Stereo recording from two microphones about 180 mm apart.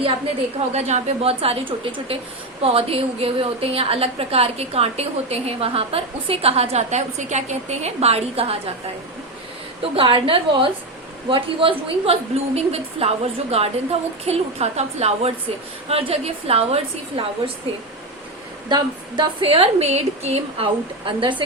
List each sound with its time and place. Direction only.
0.7 s a woman's voice: 40° right (ahead or behind)
9.9 s a woman's voice: 30° right (ahead or behind)
18.7 s a woman's voice: 25° right (ahead or behind)